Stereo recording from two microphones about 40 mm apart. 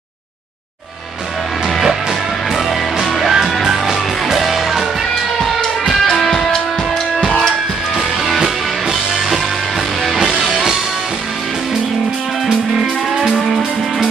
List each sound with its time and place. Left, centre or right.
2.5 s music: centre
6.2 s music: centre
10.5 s music: centre
12.4 s music: centre